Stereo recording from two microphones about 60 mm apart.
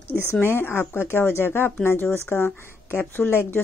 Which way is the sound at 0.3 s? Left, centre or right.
Left.